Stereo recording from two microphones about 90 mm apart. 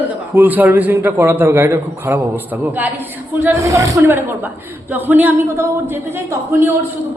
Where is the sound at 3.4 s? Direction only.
30° right (ahead or behind).